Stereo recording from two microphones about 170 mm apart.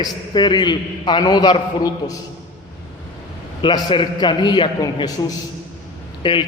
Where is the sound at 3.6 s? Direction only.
30° left (ahead or behind).